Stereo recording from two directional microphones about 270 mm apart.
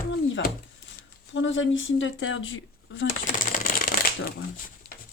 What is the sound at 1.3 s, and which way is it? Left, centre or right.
Speech, left.